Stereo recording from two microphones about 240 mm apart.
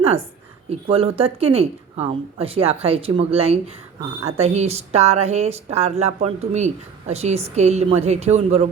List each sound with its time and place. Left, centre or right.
0.0 s a woman's voice: right